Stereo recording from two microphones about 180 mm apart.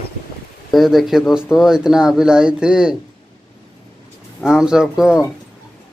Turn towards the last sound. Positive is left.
turn(degrees=0)  # may be behind; listen again after turning